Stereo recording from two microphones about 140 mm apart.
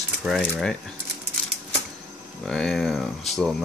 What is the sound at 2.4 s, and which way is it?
Speech, 5° left (ahead or behind).